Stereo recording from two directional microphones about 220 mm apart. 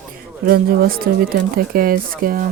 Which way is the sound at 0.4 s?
40° right (ahead or behind).